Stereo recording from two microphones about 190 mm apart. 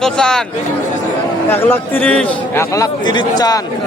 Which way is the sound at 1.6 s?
5° left (ahead or behind).